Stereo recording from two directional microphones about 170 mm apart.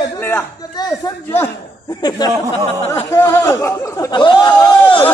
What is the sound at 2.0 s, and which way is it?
Speech, 25° left (ahead or behind).